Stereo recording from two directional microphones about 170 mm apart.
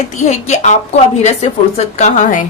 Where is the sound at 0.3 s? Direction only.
45° left (ahead or behind).